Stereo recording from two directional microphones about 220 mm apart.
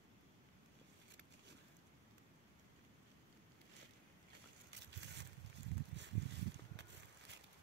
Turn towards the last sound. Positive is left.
turn(degrees=-55)  # may be behind; listen again after turning